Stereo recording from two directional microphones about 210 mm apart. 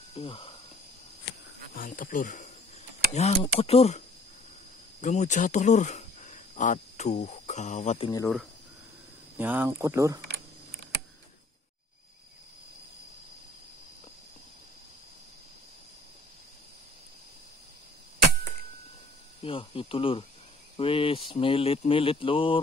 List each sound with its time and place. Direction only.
0.1 s speech: 25° left (ahead or behind)
1.8 s speech: 40° left (ahead or behind)
5.0 s speech: 35° left (ahead or behind)
9.4 s speech: 10° right (ahead or behind)
19.4 s speech: 25° left (ahead or behind)